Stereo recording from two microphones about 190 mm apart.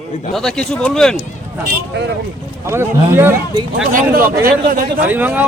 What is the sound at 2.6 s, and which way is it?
Speech, 10° right (ahead or behind).